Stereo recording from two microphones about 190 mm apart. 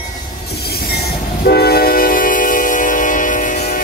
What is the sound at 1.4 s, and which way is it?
Train, 55° left (ahead or behind).